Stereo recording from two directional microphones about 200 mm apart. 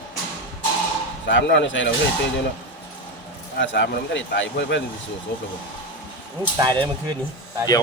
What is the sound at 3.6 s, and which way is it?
Speech, 65° left (ahead or behind).